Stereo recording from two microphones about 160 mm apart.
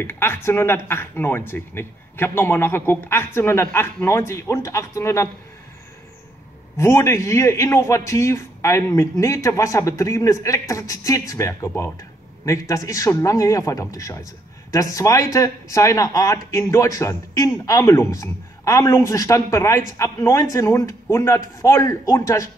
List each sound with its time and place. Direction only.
0.0 s speech: 15° left (ahead or behind)
6.8 s a man's voice: 15° left (ahead or behind)